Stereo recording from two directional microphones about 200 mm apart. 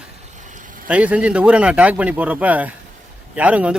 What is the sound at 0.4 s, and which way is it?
Vehicle, 40° right (ahead or behind).